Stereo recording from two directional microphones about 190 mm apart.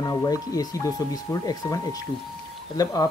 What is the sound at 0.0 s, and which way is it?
Speech, 15° left (ahead or behind).